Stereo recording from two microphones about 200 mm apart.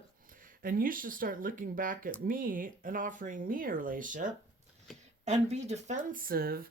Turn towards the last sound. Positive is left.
turn(degrees=-50)  # may be behind; listen again after turning